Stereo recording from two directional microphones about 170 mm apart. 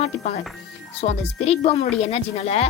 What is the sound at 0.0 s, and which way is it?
Speech, 40° left (ahead or behind).